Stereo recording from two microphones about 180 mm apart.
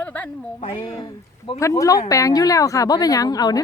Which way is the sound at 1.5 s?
15° left (ahead or behind).